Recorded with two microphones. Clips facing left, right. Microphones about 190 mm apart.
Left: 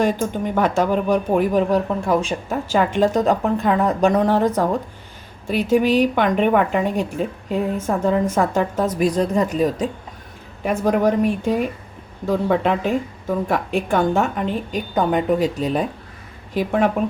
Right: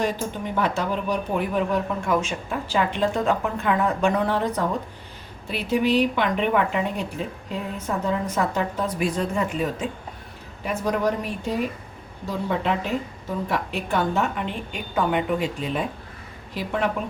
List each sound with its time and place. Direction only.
0.5 s speech: 50° left (ahead or behind)
10.6 s speech: 50° left (ahead or behind)
12.2 s speech: 50° left (ahead or behind)
16.6 s speech: 50° left (ahead or behind)